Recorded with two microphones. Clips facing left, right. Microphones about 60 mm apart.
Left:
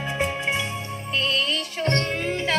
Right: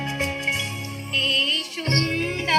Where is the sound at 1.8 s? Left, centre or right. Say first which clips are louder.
Left 1 dB; centre.